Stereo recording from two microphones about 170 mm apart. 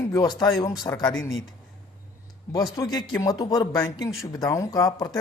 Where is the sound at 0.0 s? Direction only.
20° left (ahead or behind).